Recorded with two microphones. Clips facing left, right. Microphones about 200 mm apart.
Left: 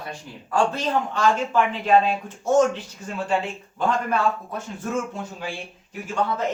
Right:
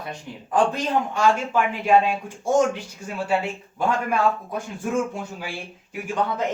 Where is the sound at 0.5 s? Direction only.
15° right (ahead or behind).